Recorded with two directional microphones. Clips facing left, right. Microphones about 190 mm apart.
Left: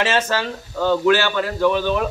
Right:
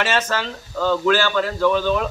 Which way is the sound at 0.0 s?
25° left (ahead or behind).